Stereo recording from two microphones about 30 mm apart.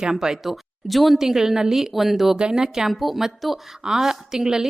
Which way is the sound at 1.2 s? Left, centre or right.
Centre.